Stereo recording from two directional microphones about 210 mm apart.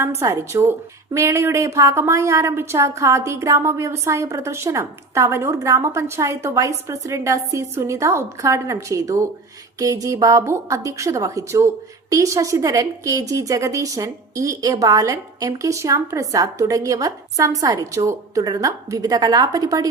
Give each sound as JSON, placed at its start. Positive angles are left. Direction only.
{"t": 0.0, "sound": "a woman's voice", "side_deg": -10}